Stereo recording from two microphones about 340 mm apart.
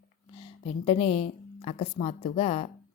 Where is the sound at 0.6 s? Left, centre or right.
Centre.